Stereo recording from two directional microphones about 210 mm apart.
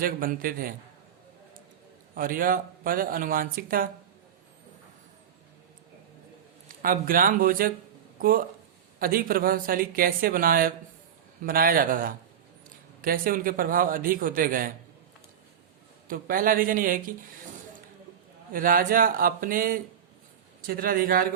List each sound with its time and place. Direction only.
0.0 s speech: 45° right (ahead or behind)
2.1 s a man's voice: 40° right (ahead or behind)
6.7 s a man's voice: 40° right (ahead or behind)
16.0 s a man's voice: 40° right (ahead or behind)
18.5 s a man's voice: 40° right (ahead or behind)